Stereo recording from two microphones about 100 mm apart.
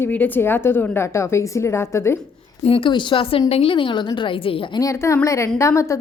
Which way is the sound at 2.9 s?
50° left (ahead or behind).